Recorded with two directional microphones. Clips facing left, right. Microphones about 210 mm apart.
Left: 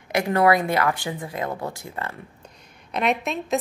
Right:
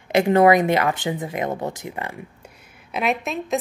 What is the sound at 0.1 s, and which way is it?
Speech, 25° right (ahead or behind).